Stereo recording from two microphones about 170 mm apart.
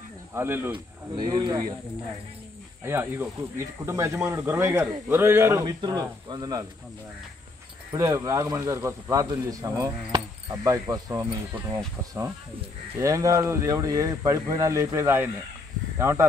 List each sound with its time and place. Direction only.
0.3 s a man's voice: 15° right (ahead or behind)
1.1 s speech: 25° right (ahead or behind)
2.8 s a man's voice: 15° right (ahead or behind)
7.9 s a man's voice: 20° right (ahead or behind)